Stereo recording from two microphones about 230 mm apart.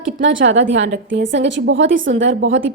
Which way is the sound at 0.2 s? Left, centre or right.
Right.